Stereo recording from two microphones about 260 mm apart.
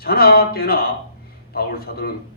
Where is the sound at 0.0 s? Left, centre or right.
Left.